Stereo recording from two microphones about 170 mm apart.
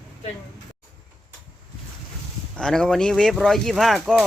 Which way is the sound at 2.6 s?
5° left (ahead or behind).